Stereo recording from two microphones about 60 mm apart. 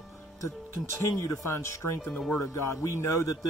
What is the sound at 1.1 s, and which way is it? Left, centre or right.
A man's voice, left.